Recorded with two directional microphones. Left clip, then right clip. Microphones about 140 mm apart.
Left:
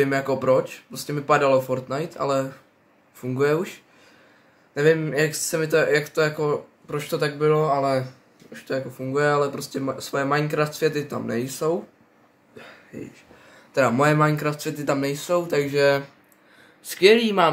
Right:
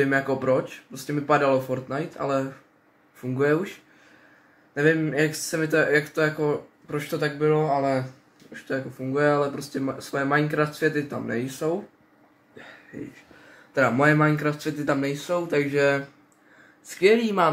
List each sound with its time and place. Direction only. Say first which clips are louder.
0.0 s speech: left 1 dB; 10° left (ahead or behind)
4.7 s speech: left 2 dB; 15° left (ahead or behind)
13.7 s speech: left 1 dB; 15° left (ahead or behind)
16.8 s a man's voice: left 3 dB; 25° left (ahead or behind)